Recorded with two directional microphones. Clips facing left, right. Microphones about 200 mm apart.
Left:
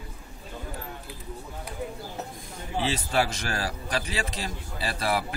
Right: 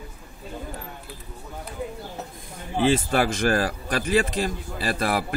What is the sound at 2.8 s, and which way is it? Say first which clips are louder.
A man's voice: right 6 dB; 50° right (ahead or behind).